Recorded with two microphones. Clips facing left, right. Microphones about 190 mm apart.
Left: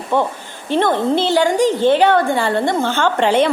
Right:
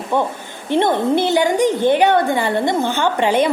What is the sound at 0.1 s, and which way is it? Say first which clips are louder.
A woman's voice: left 1 dB; 15° right (ahead or behind).